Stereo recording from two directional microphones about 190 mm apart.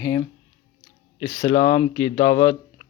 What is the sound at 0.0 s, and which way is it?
Speech, 15° left (ahead or behind).